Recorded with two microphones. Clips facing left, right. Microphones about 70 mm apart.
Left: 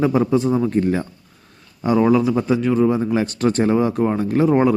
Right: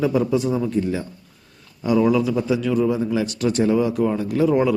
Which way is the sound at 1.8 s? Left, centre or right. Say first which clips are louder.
Left 2 dB; left.